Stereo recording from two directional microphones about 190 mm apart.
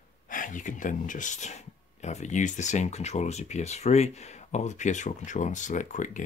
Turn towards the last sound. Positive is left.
turn(degrees=40)  # may be behind; listen again after turning